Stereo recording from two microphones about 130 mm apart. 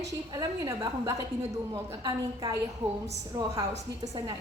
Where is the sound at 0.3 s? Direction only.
30° right (ahead or behind).